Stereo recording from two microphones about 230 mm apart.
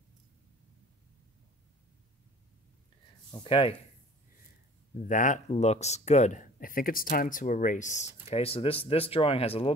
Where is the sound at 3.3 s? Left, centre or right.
Left.